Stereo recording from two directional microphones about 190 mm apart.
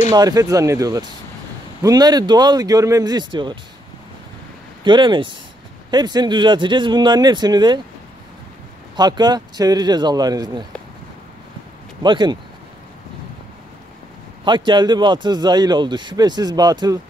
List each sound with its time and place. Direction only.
0.1 s a man's voice: 20° right (ahead or behind)
4.8 s a man's voice: 25° right (ahead or behind)
8.9 s a man's voice: 20° right (ahead or behind)
12.0 s a man's voice: 25° right (ahead or behind)
14.4 s a man's voice: 25° right (ahead or behind)